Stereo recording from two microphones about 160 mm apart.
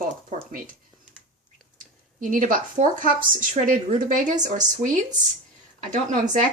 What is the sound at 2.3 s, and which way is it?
Speech, 55° right (ahead or behind).